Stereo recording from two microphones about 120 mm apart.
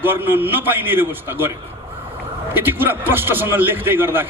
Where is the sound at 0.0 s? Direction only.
15° right (ahead or behind).